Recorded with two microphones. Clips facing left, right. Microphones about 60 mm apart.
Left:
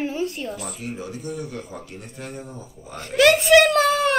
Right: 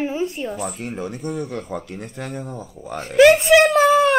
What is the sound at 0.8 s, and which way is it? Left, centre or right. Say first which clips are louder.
Speech: right 4 dB; right.